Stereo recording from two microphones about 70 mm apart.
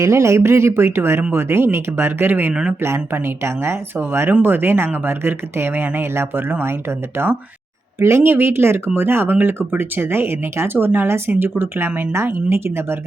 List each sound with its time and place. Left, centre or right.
0.0 s speech: right
2.5 s speech: centre
2.8 s speech: right
7.9 s speech: right